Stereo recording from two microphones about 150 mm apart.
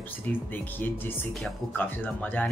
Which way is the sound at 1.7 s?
10° left (ahead or behind).